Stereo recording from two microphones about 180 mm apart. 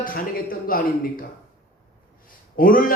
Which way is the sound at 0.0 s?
50° left (ahead or behind).